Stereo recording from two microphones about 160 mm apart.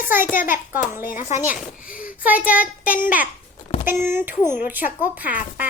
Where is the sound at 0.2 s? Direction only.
60° left (ahead or behind).